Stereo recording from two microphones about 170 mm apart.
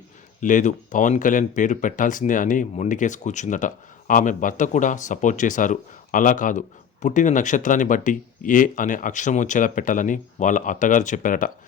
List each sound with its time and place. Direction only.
0.3 s speech: 50° left (ahead or behind)